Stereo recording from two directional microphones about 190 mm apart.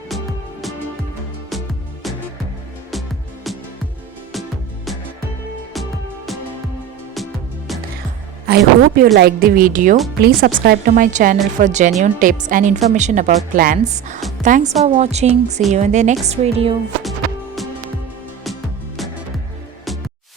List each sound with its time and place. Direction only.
8.4 s a man's voice: 55° right (ahead or behind); by 16.7 s 30° right (ahead or behind)
17.0 s music: centre (ahead or behind)